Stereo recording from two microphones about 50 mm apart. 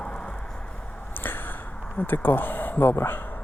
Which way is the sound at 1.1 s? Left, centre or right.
Left.